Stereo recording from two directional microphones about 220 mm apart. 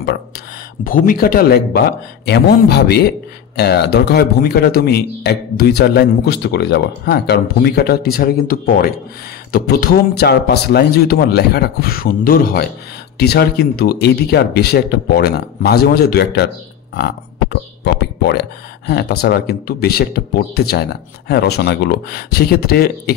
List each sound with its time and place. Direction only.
0.8 s speech: 40° left (ahead or behind)
16.9 s burping: 50° left (ahead or behind)
18.2 s speech: 50° left (ahead or behind)